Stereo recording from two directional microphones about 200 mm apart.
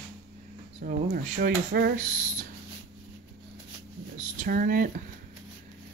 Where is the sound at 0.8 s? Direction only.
45° right (ahead or behind).